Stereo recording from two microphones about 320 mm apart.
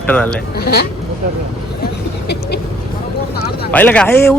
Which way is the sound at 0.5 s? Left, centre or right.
Left.